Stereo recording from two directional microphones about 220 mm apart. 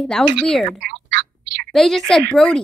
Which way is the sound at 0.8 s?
50° right (ahead or behind).